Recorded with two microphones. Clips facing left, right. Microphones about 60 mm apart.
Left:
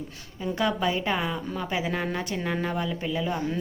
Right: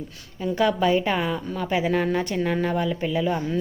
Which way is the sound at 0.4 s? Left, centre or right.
Centre.